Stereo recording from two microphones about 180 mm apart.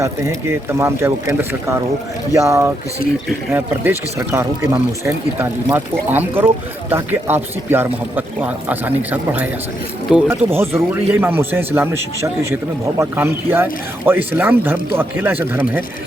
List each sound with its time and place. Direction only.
0.0 s speech: 15° right (ahead or behind)